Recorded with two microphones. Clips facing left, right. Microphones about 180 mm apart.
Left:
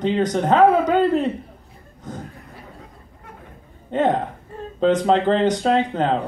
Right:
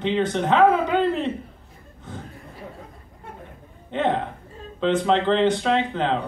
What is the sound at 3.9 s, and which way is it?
A man's voice, 40° left (ahead or behind).